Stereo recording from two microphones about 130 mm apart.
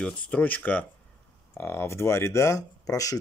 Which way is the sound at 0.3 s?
15° left (ahead or behind).